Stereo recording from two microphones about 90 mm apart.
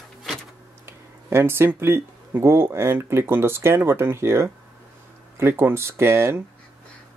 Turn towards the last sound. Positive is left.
turn(degrees=-25)  # may be behind; listen again after turning